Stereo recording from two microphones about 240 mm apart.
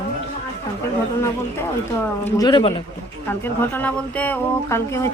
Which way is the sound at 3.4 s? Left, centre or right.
Centre.